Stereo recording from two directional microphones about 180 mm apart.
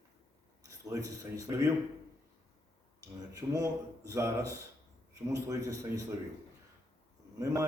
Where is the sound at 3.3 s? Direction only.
20° right (ahead or behind).